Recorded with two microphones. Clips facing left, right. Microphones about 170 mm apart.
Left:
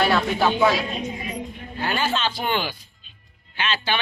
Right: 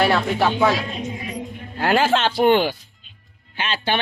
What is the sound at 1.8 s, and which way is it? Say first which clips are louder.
Speech: right 6 dB; 90° right.